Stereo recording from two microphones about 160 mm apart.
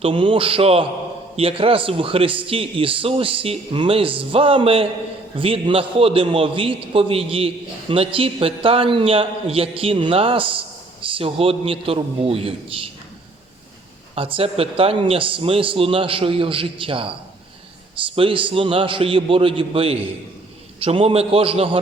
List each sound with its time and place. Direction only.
0.0 s a man's voice: 30° right (ahead or behind)
14.2 s a man's voice: 35° right (ahead or behind)